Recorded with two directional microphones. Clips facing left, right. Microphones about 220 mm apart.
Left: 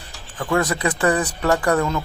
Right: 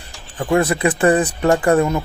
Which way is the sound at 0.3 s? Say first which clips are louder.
Right 4 dB; 25° right (ahead or behind).